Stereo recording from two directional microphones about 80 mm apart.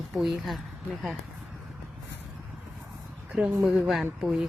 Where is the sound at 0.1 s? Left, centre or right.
Centre.